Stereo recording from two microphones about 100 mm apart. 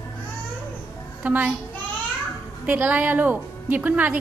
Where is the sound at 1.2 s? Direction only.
15° right (ahead or behind).